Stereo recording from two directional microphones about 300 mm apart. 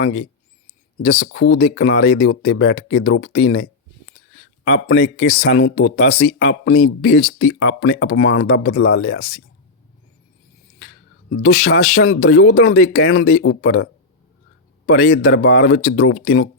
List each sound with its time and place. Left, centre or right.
1.2 s speech: left
11.3 s speech: left